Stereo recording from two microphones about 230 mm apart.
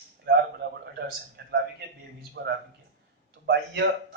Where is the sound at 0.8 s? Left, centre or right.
Right.